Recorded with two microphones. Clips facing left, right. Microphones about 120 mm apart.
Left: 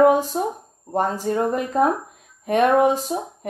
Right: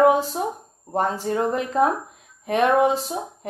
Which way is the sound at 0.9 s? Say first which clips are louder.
Left 1 dB; 35° left (ahead or behind).